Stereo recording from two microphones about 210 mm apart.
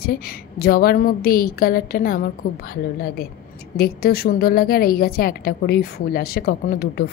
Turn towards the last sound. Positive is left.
turn(degrees=45)  # may be behind; listen again after turning